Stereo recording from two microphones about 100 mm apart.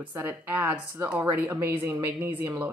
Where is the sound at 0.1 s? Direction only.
20° right (ahead or behind).